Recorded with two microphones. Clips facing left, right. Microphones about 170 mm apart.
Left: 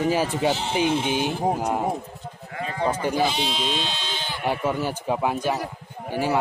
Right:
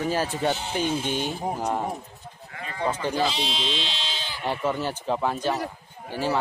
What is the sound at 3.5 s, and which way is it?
Speech, 45° left (ahead or behind).